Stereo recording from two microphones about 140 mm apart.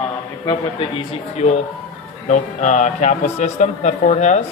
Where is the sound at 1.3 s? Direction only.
50° left (ahead or behind).